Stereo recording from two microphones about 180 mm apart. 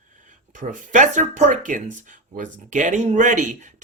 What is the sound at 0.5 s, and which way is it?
Speech, 45° right (ahead or behind).